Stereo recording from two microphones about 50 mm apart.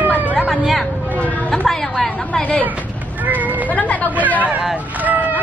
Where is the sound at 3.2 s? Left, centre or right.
Right.